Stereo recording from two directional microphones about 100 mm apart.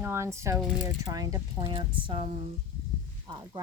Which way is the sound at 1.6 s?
60° right (ahead or behind).